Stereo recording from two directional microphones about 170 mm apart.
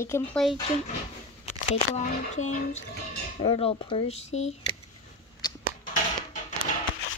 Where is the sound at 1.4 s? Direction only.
45° left (ahead or behind).